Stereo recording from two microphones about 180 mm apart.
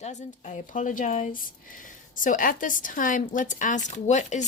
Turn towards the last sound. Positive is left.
turn(degrees=40)  # may be behind; listen again after turning